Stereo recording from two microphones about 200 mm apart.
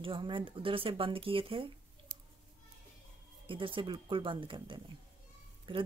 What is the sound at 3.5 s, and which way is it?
Speech, 25° right (ahead or behind).